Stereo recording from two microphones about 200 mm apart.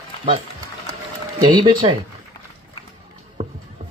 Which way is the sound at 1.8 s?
25° right (ahead or behind).